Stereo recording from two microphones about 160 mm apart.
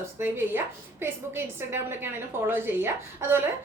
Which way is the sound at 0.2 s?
15° right (ahead or behind).